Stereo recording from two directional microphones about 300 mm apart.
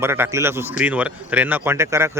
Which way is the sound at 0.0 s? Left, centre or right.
Centre.